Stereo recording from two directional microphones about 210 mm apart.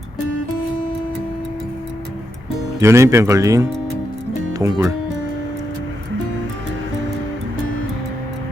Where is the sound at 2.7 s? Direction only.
15° right (ahead or behind).